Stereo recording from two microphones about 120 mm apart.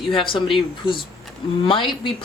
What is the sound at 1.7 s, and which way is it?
Speech, 45° left (ahead or behind).